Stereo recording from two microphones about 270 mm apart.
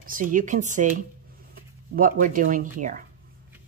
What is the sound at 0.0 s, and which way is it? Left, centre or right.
Speech, right.